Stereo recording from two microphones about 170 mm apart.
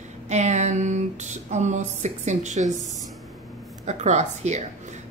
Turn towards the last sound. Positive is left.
turn(degrees=-45)  # may be behind; listen again after turning